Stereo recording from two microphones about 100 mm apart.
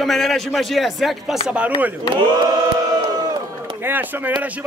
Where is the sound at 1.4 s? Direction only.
10° right (ahead or behind).